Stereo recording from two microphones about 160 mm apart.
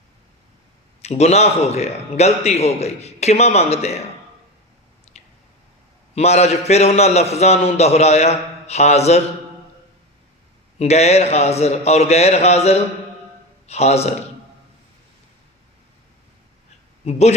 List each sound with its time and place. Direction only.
1.0 s a man's voice: 45° left (ahead or behind)
6.1 s a man's voice: 45° left (ahead or behind)
10.8 s a man's voice: 40° left (ahead or behind)
17.1 s a man's voice: 40° left (ahead or behind)